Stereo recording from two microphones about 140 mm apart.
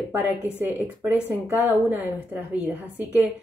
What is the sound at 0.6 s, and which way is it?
Speech, 10° right (ahead or behind).